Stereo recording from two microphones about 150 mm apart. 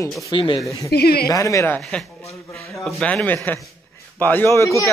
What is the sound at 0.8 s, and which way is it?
Speech, 90° left.